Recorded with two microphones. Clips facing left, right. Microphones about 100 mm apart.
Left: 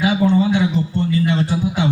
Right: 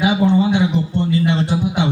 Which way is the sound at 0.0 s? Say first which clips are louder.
Right 1 dB; 20° right (ahead or behind).